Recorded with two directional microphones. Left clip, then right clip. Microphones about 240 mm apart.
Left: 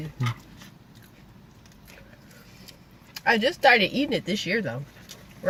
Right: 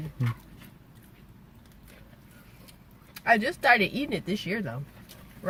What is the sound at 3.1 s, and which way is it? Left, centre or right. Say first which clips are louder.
Speech: left 1 dB; centre.